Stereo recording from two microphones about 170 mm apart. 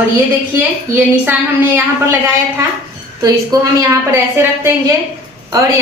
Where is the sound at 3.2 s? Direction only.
20° right (ahead or behind).